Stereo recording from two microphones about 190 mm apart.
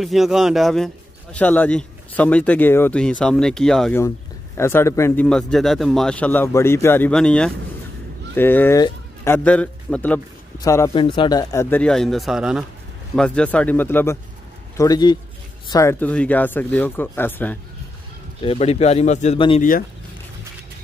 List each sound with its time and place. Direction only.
0.0 s speech: centre (ahead or behind)
4.6 s a man's voice: 15° left (ahead or behind)
11.7 s a man's voice: 5° left (ahead or behind)
18.4 s speech: 30° left (ahead or behind)